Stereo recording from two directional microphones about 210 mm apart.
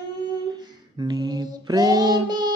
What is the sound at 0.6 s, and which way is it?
Female singing, 20° right (ahead or behind).